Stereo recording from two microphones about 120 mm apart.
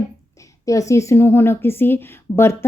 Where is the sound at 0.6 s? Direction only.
25° left (ahead or behind).